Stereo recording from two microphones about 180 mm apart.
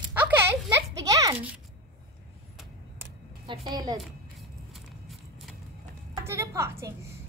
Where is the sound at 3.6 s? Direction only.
20° right (ahead or behind).